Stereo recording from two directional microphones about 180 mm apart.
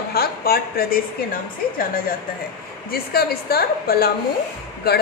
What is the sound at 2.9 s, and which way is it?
A woman's voice, 60° left (ahead or behind).